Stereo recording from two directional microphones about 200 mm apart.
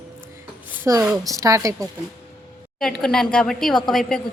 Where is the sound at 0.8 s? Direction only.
15° right (ahead or behind).